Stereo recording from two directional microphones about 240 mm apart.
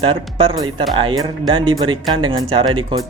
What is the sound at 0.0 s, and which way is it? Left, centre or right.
Speech, right.